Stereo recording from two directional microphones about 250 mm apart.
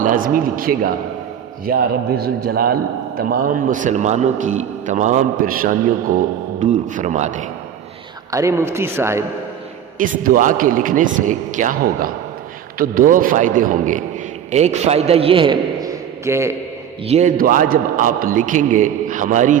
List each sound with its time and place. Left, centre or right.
0.0 s a man's voice: right
8.3 s a man's voice: centre
10.0 s a man's voice: right; by 16.6 s centre
17.1 s a man's voice: right